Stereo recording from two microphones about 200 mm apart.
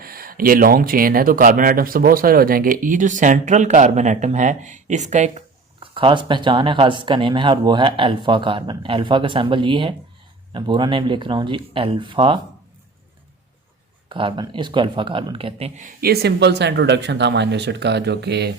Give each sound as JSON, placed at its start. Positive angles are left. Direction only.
{"t": 0.0, "sound": "speech", "side_deg": -45}
{"t": 5.8, "sound": "speech", "side_deg": -25}
{"t": 14.1, "sound": "speech", "side_deg": -25}